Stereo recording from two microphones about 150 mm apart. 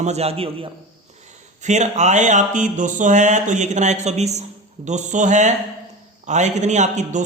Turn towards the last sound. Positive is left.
turn(degrees=-55)  # may be behind; listen again after turning